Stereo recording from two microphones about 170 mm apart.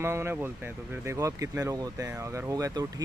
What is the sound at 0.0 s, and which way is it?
Speech, 15° right (ahead or behind).